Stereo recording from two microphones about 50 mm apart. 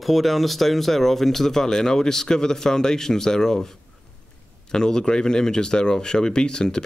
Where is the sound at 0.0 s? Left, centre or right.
Centre.